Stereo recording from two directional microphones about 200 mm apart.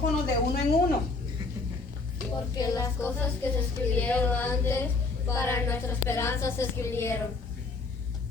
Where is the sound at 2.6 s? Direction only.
15° left (ahead or behind).